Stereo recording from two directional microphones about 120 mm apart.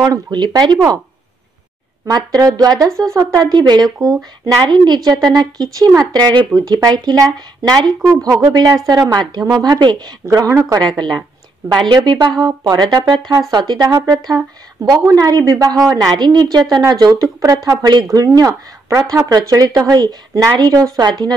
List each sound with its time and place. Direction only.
0.0 s speech: 35° right (ahead or behind)
2.1 s speech: 30° right (ahead or behind)
10.2 s speech: 25° right (ahead or behind)
10.7 s speech: 35° right (ahead or behind)